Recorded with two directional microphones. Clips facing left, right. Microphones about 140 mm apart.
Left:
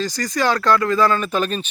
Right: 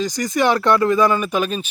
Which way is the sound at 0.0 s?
20° right (ahead or behind).